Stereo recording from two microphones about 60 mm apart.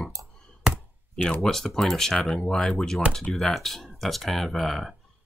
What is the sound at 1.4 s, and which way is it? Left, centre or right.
Speech, centre.